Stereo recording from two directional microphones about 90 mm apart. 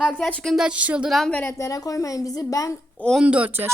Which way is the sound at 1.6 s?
40° left (ahead or behind).